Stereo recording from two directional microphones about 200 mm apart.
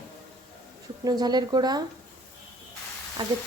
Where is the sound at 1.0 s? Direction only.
20° right (ahead or behind).